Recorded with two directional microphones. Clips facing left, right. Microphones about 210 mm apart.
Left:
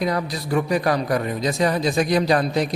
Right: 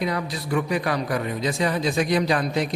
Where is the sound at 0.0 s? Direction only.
40° left (ahead or behind).